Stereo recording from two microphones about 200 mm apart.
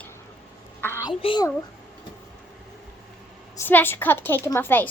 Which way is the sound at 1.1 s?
25° left (ahead or behind).